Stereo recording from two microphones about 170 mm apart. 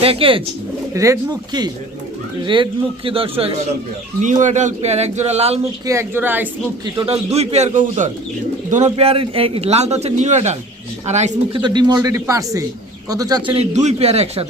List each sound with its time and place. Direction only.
0.0 s a man's voice: 35° right (ahead or behind)
0.9 s a man's voice: 20° right (ahead or behind)
4.2 s a man's voice: 45° right (ahead or behind)
5.8 s a woman's voice: 15° right (ahead or behind)
6.9 s a man's voice: 35° right (ahead or behind)
11.5 s a man's voice: 25° right (ahead or behind)